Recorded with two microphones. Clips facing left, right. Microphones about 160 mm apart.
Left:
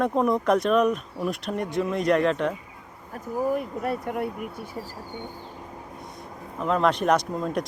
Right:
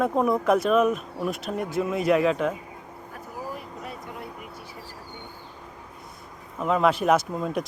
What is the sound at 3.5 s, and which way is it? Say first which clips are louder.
Speech: left 10 dB; 55° left (ahead or behind).